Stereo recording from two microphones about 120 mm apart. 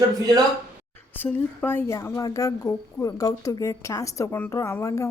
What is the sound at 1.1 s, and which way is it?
Speech, 15° left (ahead or behind).